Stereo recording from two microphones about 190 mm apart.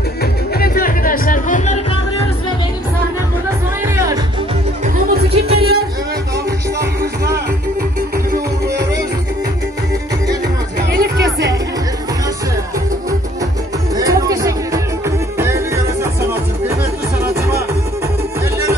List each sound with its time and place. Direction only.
0.2 s music: 50° left (ahead or behind)
3.8 s music: 15° right (ahead or behind)
5.1 s music: 55° right (ahead or behind)
10.9 s music: 50° right (ahead or behind)
11.2 s music: 15° right (ahead or behind)
13.9 s music: 20° right (ahead or behind)